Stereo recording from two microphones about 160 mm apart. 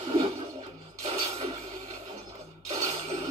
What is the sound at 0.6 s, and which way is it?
Music, 45° right (ahead or behind).